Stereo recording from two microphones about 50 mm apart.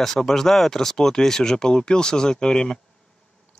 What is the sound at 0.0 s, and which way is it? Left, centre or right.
Speech, centre.